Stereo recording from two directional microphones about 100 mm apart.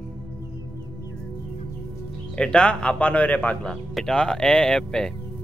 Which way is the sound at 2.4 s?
10° left (ahead or behind).